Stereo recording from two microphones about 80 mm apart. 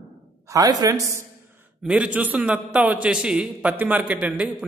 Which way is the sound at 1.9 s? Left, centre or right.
Centre.